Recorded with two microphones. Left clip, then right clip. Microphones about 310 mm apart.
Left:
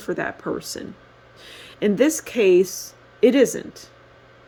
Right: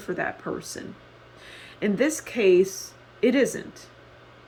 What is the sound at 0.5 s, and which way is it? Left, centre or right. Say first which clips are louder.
Speech: left 5 dB; left.